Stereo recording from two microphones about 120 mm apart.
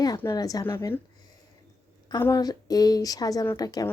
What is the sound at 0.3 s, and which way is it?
Speech, 30° left (ahead or behind).